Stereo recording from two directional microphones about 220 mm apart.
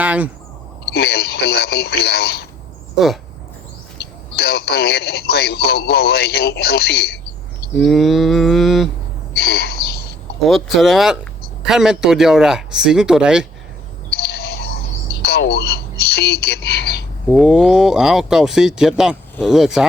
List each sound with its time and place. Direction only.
0.0 s a sound: 5° right (ahead or behind)
0.9 s speech: 45° left (ahead or behind)
3.0 s speech: centre (ahead or behind)
3.9 s speech: 50° left (ahead or behind)
7.8 s speech: centre (ahead or behind)
9.3 s bird vocalization: 45° left (ahead or behind)
10.4 s speech: centre (ahead or behind)
14.1 s bird vocalization: 45° left (ahead or behind)
15.2 s speech: 45° left (ahead or behind)
17.3 s speech: 5° right (ahead or behind)